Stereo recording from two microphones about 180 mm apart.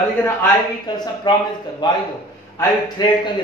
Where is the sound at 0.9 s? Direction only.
20° left (ahead or behind).